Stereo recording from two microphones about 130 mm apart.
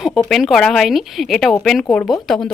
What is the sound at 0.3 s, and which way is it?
Speech, centre (ahead or behind).